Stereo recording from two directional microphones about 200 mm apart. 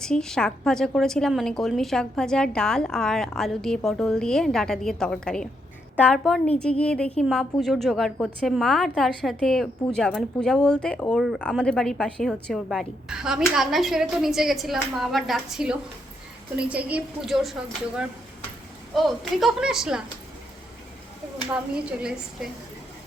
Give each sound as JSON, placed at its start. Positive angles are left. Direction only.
{"t": 0.0, "sound": "a woman's voice", "side_deg": 5}
{"t": 18.9, "sound": "a woman's voice", "side_deg": 0}
{"t": 21.8, "sound": "a woman's voice", "side_deg": -5}